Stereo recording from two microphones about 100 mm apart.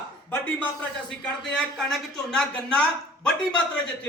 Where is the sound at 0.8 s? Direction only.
5° left (ahead or behind).